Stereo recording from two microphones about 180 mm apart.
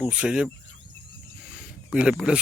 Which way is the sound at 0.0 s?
5° right (ahead or behind).